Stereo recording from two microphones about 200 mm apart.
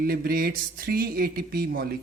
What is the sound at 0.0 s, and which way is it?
Speech, 50° right (ahead or behind).